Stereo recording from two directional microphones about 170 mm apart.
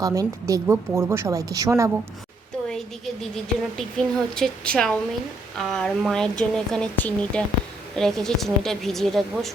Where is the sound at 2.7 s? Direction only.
Centre (ahead or behind).